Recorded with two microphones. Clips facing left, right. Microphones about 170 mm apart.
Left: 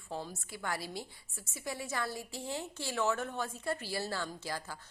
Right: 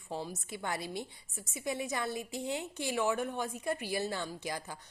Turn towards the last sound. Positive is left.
turn(degrees=-20)  # may be behind; listen again after turning